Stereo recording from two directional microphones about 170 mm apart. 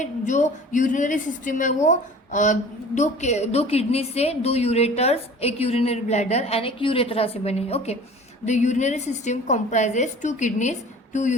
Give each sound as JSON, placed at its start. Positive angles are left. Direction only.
{"t": 0.0, "sound": "a woman's voice", "side_deg": 45}